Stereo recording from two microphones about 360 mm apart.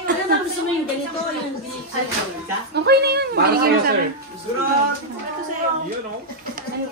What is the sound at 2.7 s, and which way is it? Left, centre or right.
A woman's voice, right.